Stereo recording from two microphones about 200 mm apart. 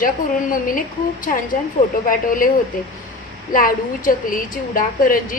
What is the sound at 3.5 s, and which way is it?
A woman's voice, 45° left (ahead or behind).